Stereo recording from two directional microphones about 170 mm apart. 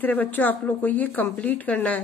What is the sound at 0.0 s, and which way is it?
A woman's voice, 10° left (ahead or behind).